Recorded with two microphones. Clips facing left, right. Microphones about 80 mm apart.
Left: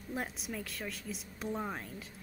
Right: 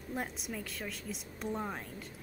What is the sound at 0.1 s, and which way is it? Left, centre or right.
Speech, centre.